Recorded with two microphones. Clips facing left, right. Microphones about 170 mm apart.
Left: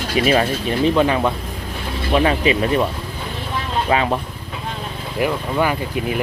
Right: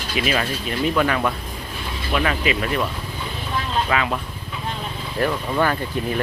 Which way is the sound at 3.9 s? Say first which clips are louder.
Left 6 dB; 30° left (ahead or behind).